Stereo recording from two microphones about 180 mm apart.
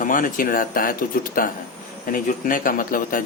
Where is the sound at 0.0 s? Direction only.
50° left (ahead or behind).